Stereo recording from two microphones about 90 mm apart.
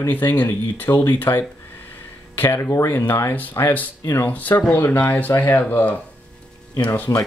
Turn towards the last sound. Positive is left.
turn(degrees=20)  # may be behind; listen again after turning